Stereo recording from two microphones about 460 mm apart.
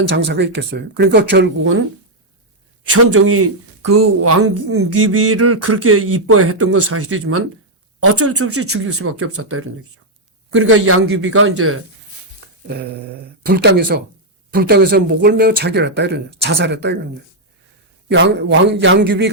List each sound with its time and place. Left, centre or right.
0.1 s speech: right
2.9 s speech: right
13.4 s speech: centre
18.1 s speech: right